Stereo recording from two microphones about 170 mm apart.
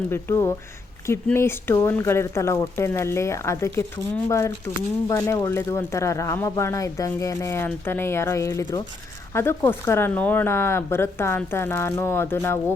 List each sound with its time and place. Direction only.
0.1 s speech: 15° left (ahead or behind)